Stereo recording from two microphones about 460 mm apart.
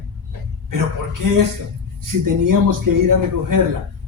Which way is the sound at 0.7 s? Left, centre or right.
Right.